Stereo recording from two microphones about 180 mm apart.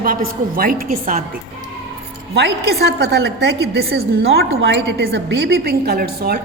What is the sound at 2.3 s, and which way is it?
A woman's voice, 65° right (ahead or behind).